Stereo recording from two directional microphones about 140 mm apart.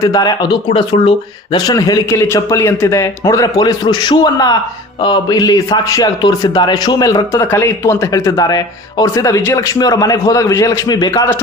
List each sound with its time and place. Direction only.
0.0 s a man's voice: 25° left (ahead or behind)
1.5 s a man's voice: 25° left (ahead or behind)